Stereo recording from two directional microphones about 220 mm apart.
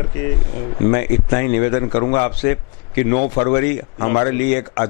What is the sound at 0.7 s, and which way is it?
A man's voice, 15° left (ahead or behind).